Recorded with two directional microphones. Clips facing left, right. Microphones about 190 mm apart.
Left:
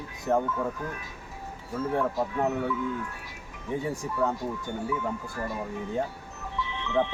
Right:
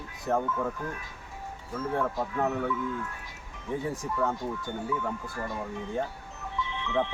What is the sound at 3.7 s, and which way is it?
Speech, 15° left (ahead or behind).